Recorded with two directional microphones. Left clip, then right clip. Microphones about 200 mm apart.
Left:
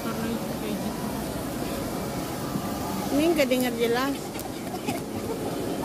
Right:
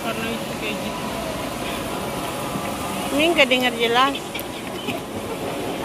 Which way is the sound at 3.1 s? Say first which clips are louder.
Right 6 dB; 30° left (ahead or behind).